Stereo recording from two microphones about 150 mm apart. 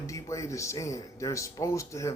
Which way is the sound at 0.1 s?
20° left (ahead or behind).